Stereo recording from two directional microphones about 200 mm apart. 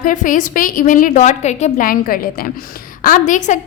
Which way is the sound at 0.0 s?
40° left (ahead or behind).